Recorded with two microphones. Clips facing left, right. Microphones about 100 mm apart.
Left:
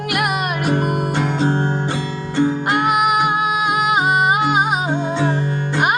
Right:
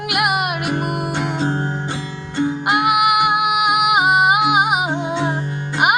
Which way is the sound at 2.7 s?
10° right (ahead or behind).